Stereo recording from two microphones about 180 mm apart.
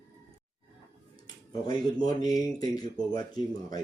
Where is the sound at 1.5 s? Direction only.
20° left (ahead or behind).